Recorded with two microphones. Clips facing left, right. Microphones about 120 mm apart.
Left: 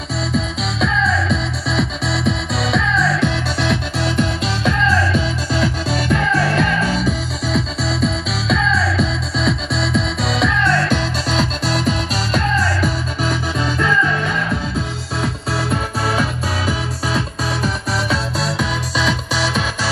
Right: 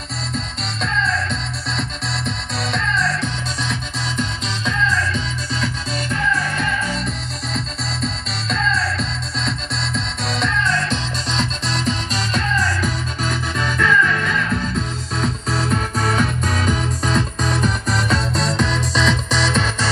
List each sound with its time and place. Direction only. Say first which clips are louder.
0.3 s music: left 6 dB; centre (ahead or behind)
3.6 s music: left 9 dB; 60° left (ahead or behind)
5.9 s music: left 4 dB; 65° left (ahead or behind)
7.0 s music: left 6 dB; centre (ahead or behind)